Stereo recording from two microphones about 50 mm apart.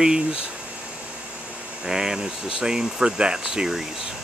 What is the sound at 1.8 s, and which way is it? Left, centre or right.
Speech, centre.